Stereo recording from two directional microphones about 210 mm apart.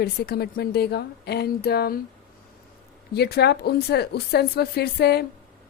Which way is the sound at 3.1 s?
50° left (ahead or behind).